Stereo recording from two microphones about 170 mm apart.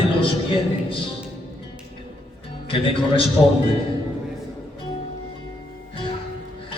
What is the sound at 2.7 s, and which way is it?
Speech, 30° left (ahead or behind).